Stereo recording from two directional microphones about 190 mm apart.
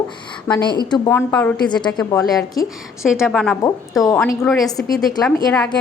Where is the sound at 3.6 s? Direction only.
20° left (ahead or behind).